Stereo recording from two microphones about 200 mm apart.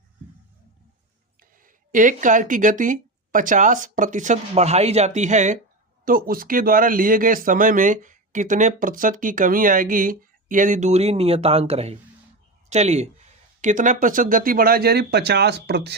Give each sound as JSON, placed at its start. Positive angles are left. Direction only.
{"t": 1.4, "sound": "speech", "side_deg": -40}